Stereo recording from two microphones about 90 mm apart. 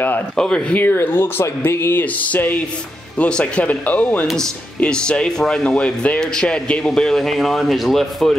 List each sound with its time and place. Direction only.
0.4 s speech: 10° left (ahead or behind)